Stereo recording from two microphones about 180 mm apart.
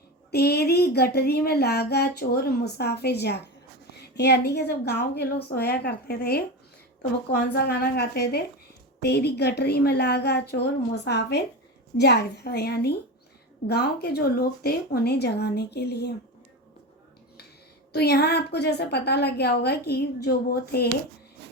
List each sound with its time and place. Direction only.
0.3 s speech: 65° left (ahead or behind)
17.9 s speech: 65° left (ahead or behind)